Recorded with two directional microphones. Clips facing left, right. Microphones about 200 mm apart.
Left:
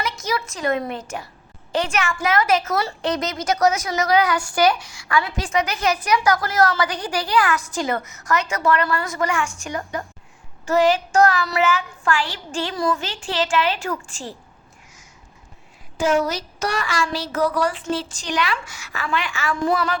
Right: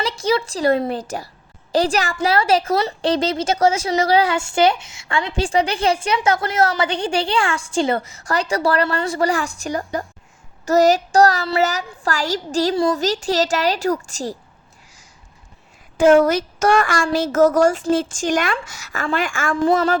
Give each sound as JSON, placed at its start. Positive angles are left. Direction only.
{"t": 0.0, "sound": "a woman's voice", "side_deg": -30}
{"t": 16.0, "sound": "speech", "side_deg": -55}